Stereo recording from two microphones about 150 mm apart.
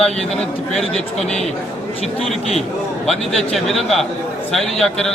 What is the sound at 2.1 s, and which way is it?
A man's voice, centre (ahead or behind).